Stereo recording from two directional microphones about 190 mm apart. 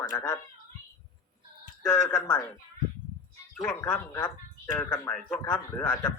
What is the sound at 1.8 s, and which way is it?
Speech, 10° left (ahead or behind).